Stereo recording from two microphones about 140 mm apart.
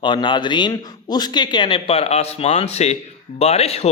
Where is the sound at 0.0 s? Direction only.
35° left (ahead or behind).